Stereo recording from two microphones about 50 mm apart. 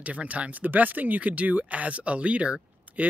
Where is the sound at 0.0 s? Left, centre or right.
Right.